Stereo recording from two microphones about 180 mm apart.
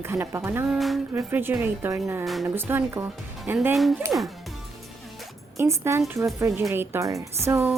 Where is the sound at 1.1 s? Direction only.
10° right (ahead or behind).